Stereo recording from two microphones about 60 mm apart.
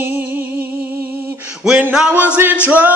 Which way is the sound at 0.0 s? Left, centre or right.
Right.